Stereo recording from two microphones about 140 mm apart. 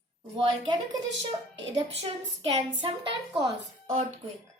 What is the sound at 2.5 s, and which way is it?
Speech, 40° right (ahead or behind).